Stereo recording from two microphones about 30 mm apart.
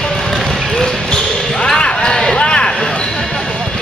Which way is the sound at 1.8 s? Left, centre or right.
Left.